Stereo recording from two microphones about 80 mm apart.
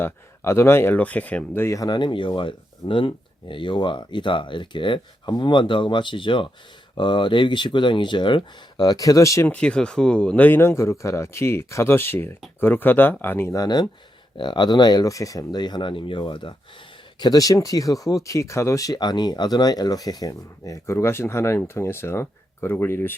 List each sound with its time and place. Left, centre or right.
0.0 s speech: left
0.9 s speech: centre
1.5 s speech: left
1.9 s speech: left
9.5 s speech: centre
13.5 s speech: left
14.3 s speech: left
15.1 s speech: left
17.2 s speech: left